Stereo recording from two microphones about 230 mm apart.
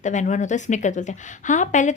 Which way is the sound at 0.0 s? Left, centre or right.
Left.